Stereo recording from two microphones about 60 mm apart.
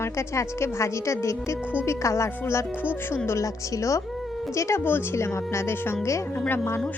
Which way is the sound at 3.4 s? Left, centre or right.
Left.